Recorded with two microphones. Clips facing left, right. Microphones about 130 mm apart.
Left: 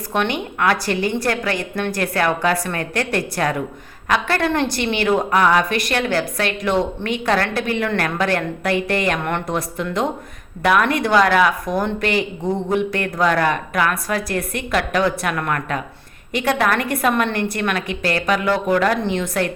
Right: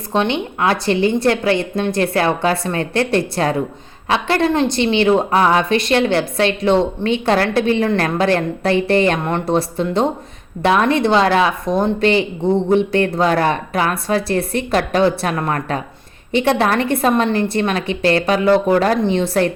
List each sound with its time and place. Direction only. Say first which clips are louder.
0.1 s a woman's voice: right 4 dB; 25° right (ahead or behind)